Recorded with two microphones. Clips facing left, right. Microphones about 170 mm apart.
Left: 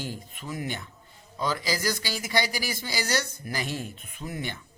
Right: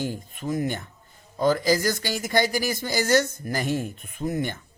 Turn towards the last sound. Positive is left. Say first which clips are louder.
# right 8 dB
turn(degrees=-45)  # may be behind; listen again after turning